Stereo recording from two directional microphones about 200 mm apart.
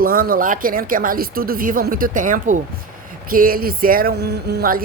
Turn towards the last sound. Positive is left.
turn(degrees=-50)  # may be behind; listen again after turning